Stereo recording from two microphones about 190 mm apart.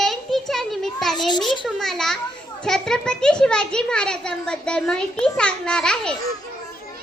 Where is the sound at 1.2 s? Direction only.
25° left (ahead or behind).